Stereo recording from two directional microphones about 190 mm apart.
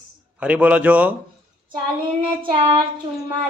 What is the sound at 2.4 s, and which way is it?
Child singing, 25° right (ahead or behind).